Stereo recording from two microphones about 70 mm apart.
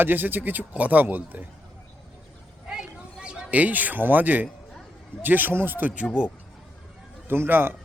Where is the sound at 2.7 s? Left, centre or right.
Centre.